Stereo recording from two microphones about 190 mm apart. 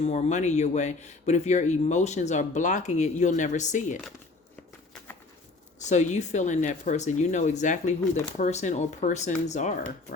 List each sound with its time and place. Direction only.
0.0 s speech: 35° left (ahead or behind)
5.8 s speech: 40° left (ahead or behind)